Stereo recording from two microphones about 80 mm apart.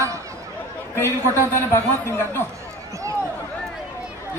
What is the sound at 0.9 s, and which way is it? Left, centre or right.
A man's voice, left.